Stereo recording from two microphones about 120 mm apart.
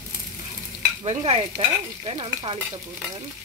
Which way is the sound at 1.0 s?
55° right (ahead or behind).